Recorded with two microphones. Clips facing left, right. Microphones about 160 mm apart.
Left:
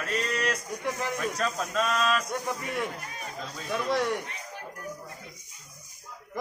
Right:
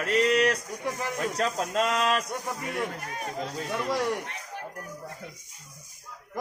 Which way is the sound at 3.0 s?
60° right (ahead or behind).